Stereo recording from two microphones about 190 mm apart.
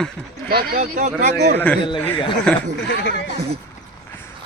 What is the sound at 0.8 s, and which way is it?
Speech, 40° right (ahead or behind).